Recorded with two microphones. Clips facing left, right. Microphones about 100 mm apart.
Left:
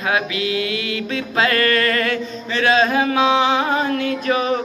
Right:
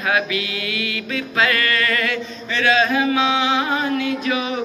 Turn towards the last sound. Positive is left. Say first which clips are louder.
# left 3 dB
turn(degrees=40)  # may be behind; listen again after turning